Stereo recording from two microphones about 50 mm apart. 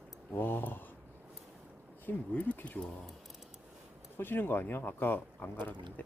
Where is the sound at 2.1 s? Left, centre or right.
Left.